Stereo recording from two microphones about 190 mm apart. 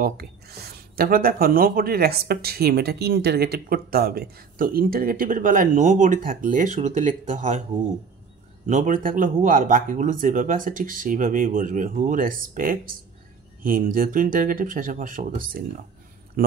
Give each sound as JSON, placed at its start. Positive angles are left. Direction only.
{"t": 0.0, "sound": "speech", "side_deg": -55}
{"t": 8.6, "sound": "speech", "side_deg": -40}